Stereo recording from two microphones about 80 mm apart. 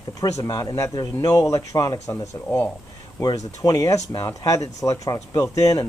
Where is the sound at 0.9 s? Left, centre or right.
Left.